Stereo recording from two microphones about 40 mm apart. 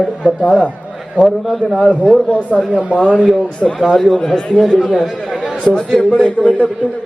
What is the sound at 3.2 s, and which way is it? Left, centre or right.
A man's voice, centre.